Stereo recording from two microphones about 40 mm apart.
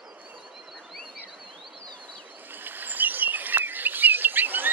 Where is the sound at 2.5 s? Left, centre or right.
Right.